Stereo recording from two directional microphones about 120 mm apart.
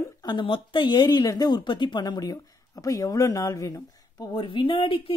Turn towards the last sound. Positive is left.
turn(degrees=50)  # may be behind; listen again after turning